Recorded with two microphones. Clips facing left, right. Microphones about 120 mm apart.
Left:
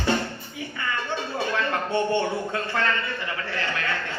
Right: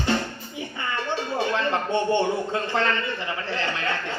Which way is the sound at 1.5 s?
20° right (ahead or behind).